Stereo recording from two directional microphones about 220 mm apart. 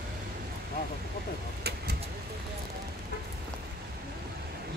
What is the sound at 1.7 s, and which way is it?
Vehicle, 45° right (ahead or behind).